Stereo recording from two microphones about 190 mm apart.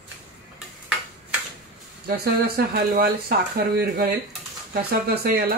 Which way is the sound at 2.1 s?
55° right (ahead or behind).